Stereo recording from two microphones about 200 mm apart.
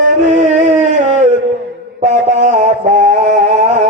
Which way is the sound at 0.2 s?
35° right (ahead or behind).